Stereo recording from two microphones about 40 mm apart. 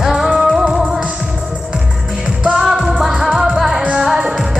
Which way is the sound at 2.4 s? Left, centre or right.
Centre.